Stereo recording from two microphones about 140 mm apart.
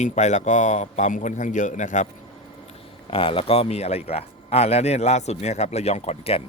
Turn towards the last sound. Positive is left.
turn(degrees=45)  # may be behind; listen again after turning